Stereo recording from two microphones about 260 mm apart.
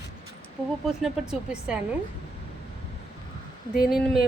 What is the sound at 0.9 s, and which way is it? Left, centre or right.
Speech, centre.